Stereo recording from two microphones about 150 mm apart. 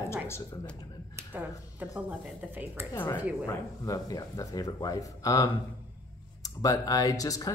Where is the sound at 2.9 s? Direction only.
25° left (ahead or behind).